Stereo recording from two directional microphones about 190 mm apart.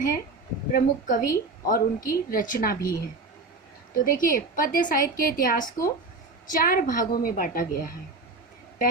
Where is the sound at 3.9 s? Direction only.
45° left (ahead or behind).